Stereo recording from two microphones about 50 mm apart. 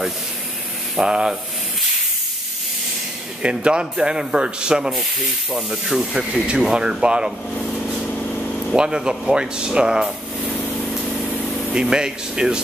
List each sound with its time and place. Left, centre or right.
0.9 s speech: centre
3.4 s speech: centre
8.7 s speech: centre
11.7 s speech: centre